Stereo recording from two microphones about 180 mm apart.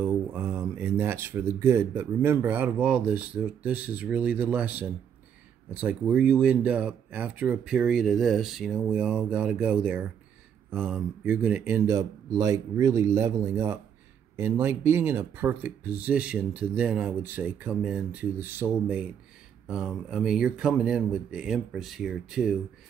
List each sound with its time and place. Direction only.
0.0 s speech: 10° right (ahead or behind)